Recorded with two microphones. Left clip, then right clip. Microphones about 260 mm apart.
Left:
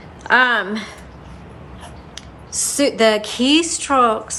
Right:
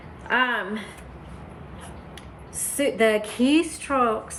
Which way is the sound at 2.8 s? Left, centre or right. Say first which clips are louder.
Left 5 dB; centre.